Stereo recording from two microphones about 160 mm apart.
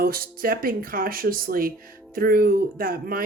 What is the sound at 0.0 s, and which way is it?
Speech, 65° right (ahead or behind).